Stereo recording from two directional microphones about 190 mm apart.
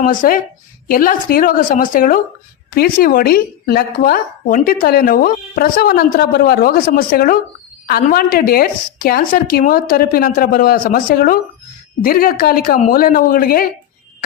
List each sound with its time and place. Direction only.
0.0 s speech: 45° left (ahead or behind)